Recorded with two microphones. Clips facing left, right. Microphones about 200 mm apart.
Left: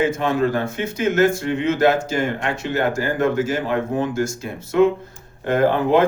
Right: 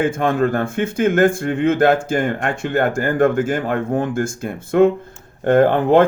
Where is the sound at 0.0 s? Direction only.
55° right (ahead or behind).